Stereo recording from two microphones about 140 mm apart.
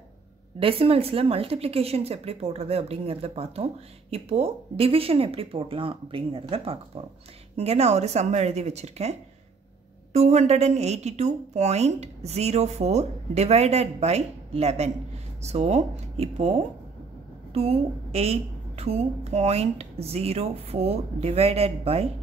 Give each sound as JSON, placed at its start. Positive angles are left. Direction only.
{"t": 0.6, "sound": "a woman's voice", "side_deg": -40}
{"t": 10.1, "sound": "a woman's voice", "side_deg": -55}